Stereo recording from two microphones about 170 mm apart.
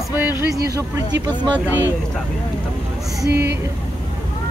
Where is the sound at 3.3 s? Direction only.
70° right (ahead or behind).